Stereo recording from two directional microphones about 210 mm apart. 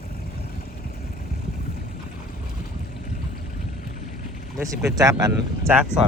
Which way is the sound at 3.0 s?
35° left (ahead or behind).